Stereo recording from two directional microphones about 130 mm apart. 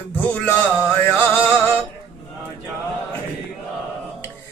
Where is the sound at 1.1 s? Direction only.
15° left (ahead or behind).